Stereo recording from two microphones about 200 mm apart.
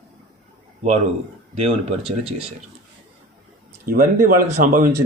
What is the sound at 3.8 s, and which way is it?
Speech, 45° right (ahead or behind).